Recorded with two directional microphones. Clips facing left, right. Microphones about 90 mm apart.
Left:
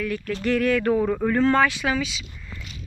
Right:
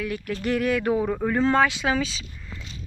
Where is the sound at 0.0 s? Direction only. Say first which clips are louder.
Left 2 dB; 15° right (ahead or behind).